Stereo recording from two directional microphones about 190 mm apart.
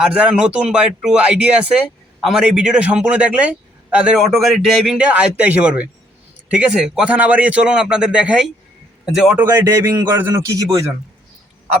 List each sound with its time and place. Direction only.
0.0 s a man's voice: 5° right (ahead or behind)